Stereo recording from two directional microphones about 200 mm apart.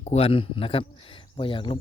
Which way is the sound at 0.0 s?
30° left (ahead or behind).